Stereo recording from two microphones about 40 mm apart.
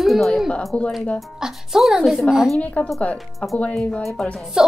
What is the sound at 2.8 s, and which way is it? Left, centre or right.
Speech, left.